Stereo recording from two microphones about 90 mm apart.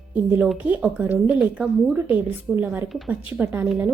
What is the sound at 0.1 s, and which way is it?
A woman's voice, 20° right (ahead or behind).